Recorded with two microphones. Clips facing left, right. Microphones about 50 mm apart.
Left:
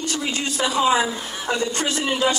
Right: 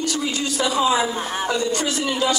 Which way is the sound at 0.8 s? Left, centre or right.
Centre.